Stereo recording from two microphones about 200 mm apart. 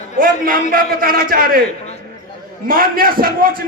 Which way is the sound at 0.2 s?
45° right (ahead or behind).